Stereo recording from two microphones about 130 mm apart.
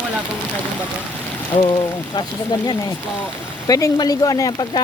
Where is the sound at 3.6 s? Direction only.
30° left (ahead or behind).